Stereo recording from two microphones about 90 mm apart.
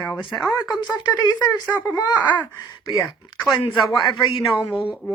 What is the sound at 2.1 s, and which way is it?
Speech, 15° left (ahead or behind).